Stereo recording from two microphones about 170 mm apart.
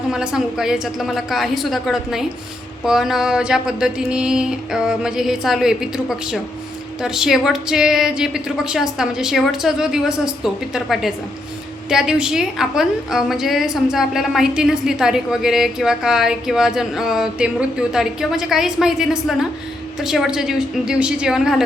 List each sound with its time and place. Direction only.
0.1 s a woman's voice: 5° right (ahead or behind)